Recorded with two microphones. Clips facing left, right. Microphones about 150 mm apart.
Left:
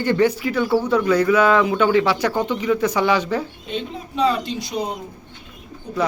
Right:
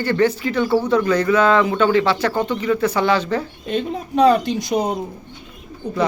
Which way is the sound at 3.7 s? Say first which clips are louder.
Right 6 dB; 45° right (ahead or behind).